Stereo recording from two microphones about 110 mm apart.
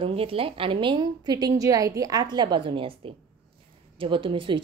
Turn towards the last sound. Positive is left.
turn(degrees=-50)  # may be behind; listen again after turning